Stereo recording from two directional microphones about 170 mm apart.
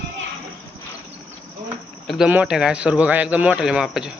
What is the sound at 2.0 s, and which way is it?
Speech, centre (ahead or behind).